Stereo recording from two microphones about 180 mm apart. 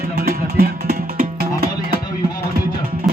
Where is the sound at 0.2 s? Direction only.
55° right (ahead or behind).